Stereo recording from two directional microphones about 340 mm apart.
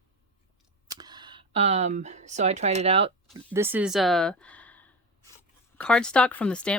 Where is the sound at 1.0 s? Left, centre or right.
Centre.